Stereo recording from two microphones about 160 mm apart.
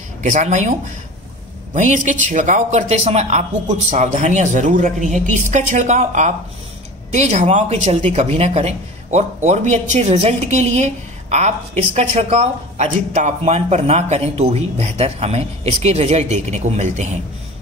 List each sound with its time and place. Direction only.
0.2 s speech: 45° right (ahead or behind)